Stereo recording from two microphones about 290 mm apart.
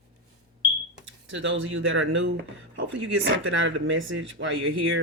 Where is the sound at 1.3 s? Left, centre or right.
Right.